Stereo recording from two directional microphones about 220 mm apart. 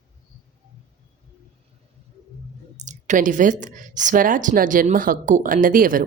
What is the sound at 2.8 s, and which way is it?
Speech, 35° right (ahead or behind).